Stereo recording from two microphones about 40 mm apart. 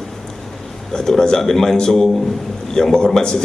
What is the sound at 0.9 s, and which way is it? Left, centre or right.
A man's voice, centre.